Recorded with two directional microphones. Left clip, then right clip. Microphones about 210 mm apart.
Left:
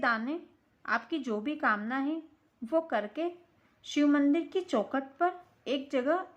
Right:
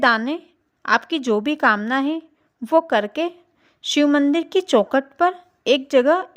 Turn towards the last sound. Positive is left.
turn(degrees=-45)  # may be behind; listen again after turning